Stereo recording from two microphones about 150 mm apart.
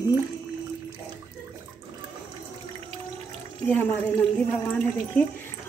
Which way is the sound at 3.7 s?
10° left (ahead or behind).